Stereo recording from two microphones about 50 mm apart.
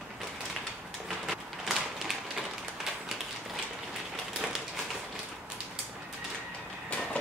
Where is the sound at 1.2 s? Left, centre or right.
Centre.